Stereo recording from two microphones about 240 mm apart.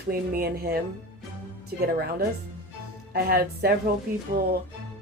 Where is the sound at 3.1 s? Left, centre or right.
Right.